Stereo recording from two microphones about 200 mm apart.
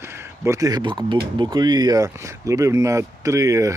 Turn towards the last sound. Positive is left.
turn(degrees=-15)  # may be behind; listen again after turning